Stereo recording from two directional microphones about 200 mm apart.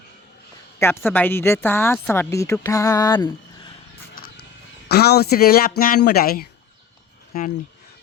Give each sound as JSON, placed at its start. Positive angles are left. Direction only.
{"t": 0.8, "sound": "a woman's voice", "side_deg": 10}
{"t": 4.1, "sound": "a sound", "side_deg": 50}
{"t": 4.9, "sound": "speech", "side_deg": 55}